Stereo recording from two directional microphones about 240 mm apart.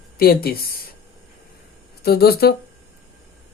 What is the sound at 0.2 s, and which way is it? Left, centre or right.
Speech, left.